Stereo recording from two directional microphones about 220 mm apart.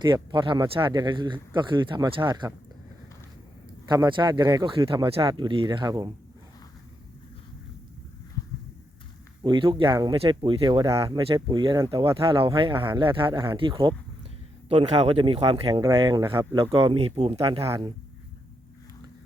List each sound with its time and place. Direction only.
0.0 s speech: 20° right (ahead or behind)
3.8 s speech: 20° right (ahead or behind)
9.4 s speech: 20° right (ahead or behind)